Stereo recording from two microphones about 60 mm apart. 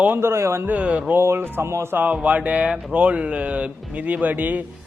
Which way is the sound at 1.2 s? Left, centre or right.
Right.